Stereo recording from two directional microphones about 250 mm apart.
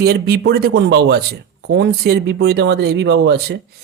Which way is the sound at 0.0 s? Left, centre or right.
Right.